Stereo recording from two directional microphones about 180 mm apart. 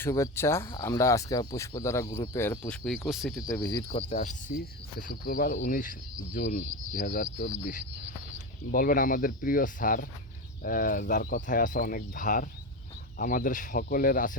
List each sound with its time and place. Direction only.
0.0 s speech: 15° left (ahead or behind); by 3.4 s centre (ahead or behind)
3.7 s speech: 20° left (ahead or behind)
3.9 s speech: 40° left (ahead or behind)
8.7 s speech: 50° left (ahead or behind)